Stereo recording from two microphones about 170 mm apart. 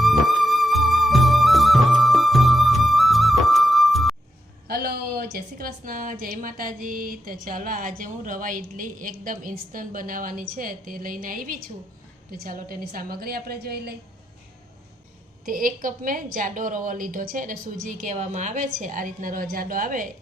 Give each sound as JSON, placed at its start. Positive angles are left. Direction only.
{"t": 0.0, "sound": "music", "side_deg": 0}
{"t": 4.7, "sound": "a sound", "side_deg": -65}
{"t": 7.4, "sound": "a woman's voice", "side_deg": -55}
{"t": 15.4, "sound": "a woman's voice", "side_deg": -55}